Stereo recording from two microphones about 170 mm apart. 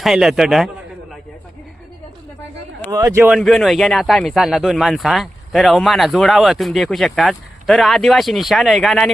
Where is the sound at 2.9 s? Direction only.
20° right (ahead or behind).